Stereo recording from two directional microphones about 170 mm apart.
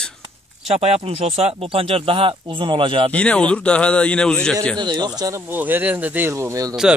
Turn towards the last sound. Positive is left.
turn(degrees=-20)  # may be behind; listen again after turning